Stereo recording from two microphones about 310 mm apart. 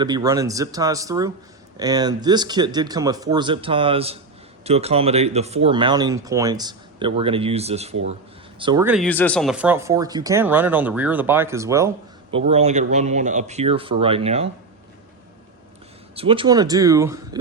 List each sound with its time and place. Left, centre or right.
0.0 s speech: centre
16.1 s speech: centre